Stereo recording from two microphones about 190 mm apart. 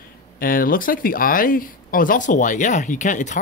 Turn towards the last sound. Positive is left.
turn(degrees=40)  # may be behind; listen again after turning